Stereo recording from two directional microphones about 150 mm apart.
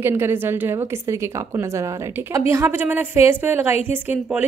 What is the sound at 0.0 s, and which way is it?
A woman's voice, 15° right (ahead or behind).